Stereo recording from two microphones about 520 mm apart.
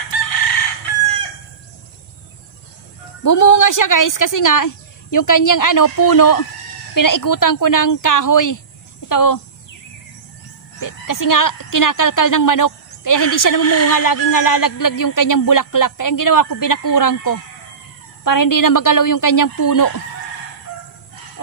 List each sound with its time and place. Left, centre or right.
0.1 s chicken: left
3.3 s speech: left
10.8 s speech: left
13.8 s speech: left